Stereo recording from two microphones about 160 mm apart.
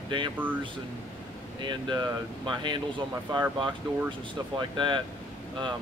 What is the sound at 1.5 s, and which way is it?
Speech, 30° right (ahead or behind).